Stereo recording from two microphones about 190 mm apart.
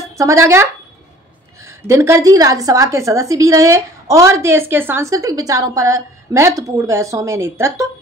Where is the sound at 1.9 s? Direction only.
15° right (ahead or behind).